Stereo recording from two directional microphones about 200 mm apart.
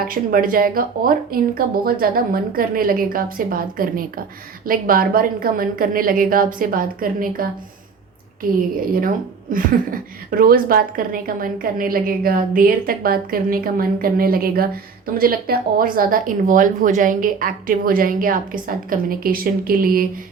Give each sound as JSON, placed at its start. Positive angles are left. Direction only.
{"t": 0.0, "sound": "a woman's voice", "side_deg": -45}
{"t": 8.7, "sound": "a woman's voice", "side_deg": -45}